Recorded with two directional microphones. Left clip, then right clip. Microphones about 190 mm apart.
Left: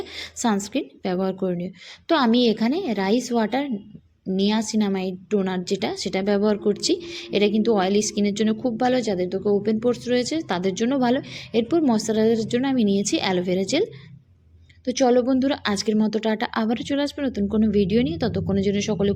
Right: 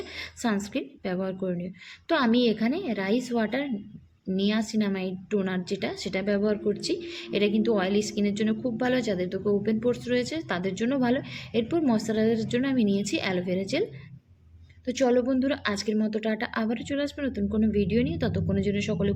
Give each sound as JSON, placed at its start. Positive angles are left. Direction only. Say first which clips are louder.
{"t": 0.0, "sound": "a woman's voice", "louder": "left 5 dB", "side_deg": 30}
{"t": 14.8, "sound": "a woman's voice", "louder": "left 5 dB", "side_deg": 25}